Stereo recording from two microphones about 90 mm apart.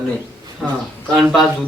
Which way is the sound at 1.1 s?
Centre (ahead or behind).